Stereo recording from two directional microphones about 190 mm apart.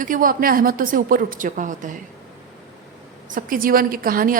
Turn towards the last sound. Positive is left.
turn(degrees=-50)  # may be behind; listen again after turning